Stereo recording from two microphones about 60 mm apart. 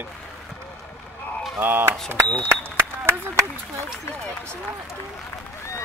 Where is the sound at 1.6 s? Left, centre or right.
Right.